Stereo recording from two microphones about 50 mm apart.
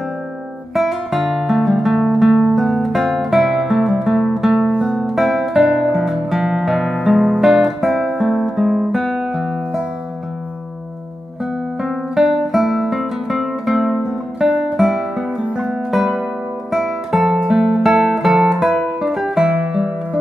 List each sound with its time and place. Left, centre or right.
0.7 s guitar: centre
4.6 s music: centre
4.9 s guitar: centre
8.1 s guitar: centre
11.8 s guitar: centre
14.5 s music: right
14.8 s music: centre